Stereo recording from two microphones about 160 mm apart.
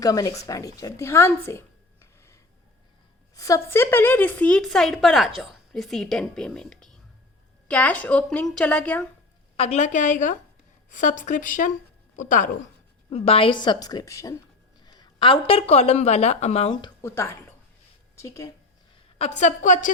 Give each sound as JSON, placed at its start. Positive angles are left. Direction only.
{"t": 0.0, "sound": "a woman's voice", "side_deg": 20}
{"t": 9.6, "sound": "a woman's voice", "side_deg": 45}
{"t": 13.1, "sound": "a woman's voice", "side_deg": 35}
{"t": 17.0, "sound": "a woman's voice", "side_deg": 15}
{"t": 19.2, "sound": "speech", "side_deg": 45}